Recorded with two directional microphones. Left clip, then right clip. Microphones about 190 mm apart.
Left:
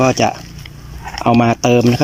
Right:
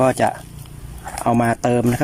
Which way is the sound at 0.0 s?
5° left (ahead or behind).